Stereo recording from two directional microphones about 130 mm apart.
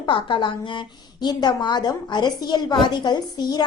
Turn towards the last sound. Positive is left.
turn(degrees=35)  # may be behind; listen again after turning